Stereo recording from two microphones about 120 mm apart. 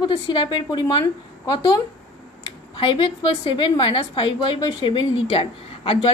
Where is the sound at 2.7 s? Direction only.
45° left (ahead or behind).